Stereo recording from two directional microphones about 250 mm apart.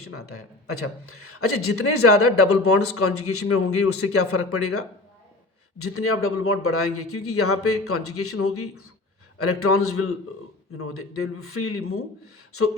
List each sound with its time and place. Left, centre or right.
0.0 s a man's voice: left